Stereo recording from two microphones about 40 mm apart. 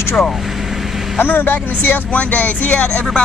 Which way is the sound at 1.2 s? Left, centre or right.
Left.